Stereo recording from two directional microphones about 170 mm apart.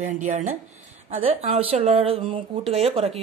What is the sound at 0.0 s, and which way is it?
Speech, 45° right (ahead or behind).